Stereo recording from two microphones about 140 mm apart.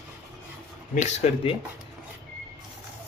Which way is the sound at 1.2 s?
50° left (ahead or behind).